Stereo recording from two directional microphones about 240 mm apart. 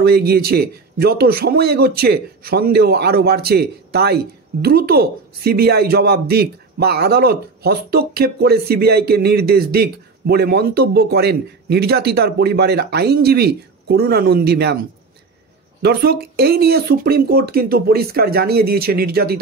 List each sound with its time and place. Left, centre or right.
0.0 s speech: right